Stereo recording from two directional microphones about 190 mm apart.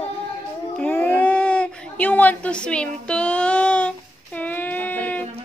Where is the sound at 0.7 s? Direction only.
10° left (ahead or behind).